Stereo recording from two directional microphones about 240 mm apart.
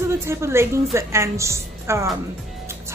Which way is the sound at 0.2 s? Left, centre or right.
Centre.